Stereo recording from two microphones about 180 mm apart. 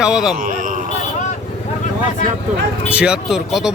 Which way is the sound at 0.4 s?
50° right (ahead or behind).